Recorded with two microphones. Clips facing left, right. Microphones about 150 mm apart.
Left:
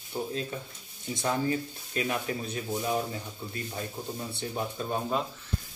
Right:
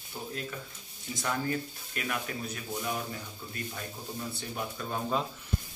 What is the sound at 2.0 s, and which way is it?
Speech, 25° left (ahead or behind).